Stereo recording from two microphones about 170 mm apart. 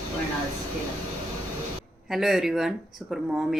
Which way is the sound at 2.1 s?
Centre (ahead or behind).